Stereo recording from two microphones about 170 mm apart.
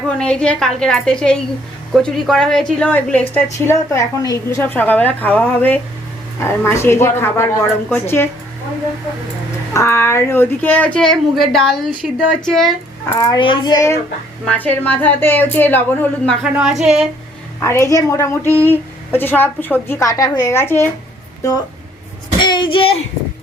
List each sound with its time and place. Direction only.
0.2 s a woman's voice: 5° left (ahead or behind)
9.7 s a woman's voice: 15° left (ahead or behind)
13.1 s a child's voice: 20° left (ahead or behind)
14.4 s a woman's voice: 10° left (ahead or behind)
16.4 s a woman's voice: 5° right (ahead or behind)
17.6 s a woman's voice: 15° left (ahead or behind)
22.4 s a sound: 25° left (ahead or behind)